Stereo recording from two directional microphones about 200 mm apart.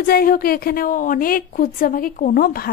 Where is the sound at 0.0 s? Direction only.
45° left (ahead or behind).